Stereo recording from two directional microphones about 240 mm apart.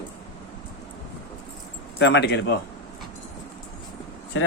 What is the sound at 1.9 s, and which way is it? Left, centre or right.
Speech, left.